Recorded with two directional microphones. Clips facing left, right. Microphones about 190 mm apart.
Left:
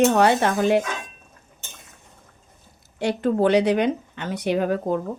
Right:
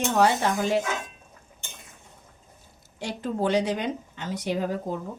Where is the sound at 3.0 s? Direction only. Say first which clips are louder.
Left 8 dB; 65° left (ahead or behind).